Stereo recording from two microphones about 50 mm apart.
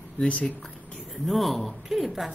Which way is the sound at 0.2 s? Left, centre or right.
Left.